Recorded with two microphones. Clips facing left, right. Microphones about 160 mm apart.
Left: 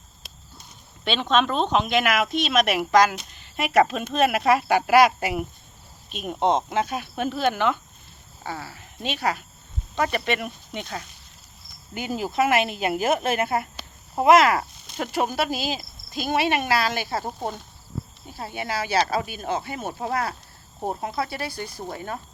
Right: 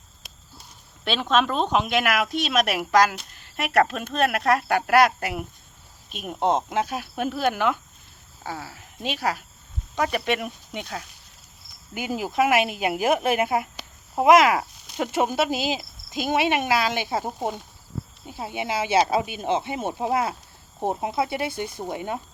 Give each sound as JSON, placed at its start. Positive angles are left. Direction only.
{"t": 1.0, "sound": "speech", "side_deg": -5}